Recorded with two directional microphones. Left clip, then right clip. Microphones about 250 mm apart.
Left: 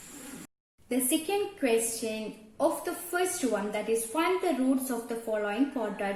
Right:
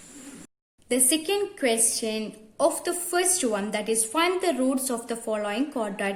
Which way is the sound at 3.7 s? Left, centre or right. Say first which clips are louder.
Right 3 dB; right.